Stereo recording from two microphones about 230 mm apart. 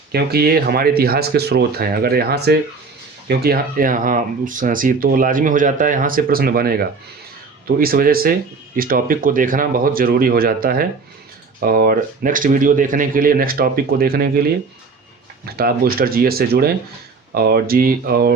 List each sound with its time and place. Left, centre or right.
0.1 s speech: right
15.4 s speech: right